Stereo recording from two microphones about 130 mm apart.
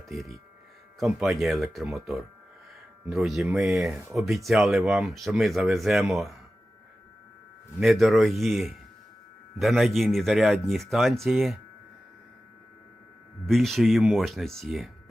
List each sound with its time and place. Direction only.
0.1 s speech: centre (ahead or behind)
7.8 s speech: centre (ahead or behind)
13.5 s speech: centre (ahead or behind)